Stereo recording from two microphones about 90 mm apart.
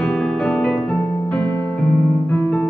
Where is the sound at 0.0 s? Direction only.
10° left (ahead or behind).